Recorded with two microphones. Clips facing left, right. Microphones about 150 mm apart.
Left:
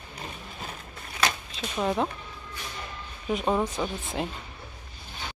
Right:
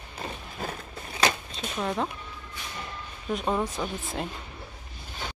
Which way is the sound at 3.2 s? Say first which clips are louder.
Left 2 dB; 5° left (ahead or behind).